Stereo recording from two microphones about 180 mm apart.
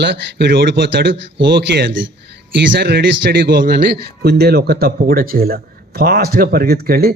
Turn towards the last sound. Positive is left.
turn(degrees=-55)  # may be behind; listen again after turning